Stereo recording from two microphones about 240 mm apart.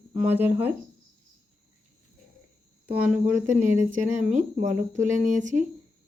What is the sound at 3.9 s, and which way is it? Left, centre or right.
Speech, right.